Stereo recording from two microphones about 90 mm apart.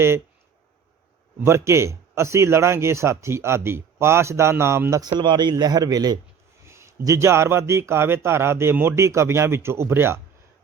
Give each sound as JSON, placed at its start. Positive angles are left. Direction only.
{"t": 1.5, "sound": "speech", "side_deg": -30}
{"t": 5.2, "sound": "a man's voice", "side_deg": -60}
{"t": 6.7, "sound": "speech", "side_deg": -30}